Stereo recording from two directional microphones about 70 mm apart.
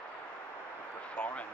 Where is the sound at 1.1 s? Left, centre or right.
Centre.